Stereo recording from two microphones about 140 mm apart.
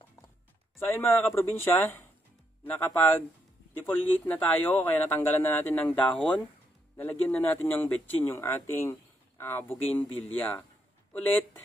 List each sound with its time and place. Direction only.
0.7 s speech: 15° left (ahead or behind)